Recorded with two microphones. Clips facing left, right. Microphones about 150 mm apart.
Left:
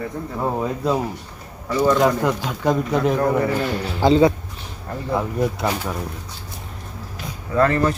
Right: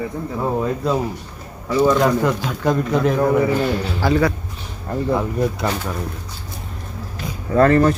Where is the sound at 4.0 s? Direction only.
20° left (ahead or behind).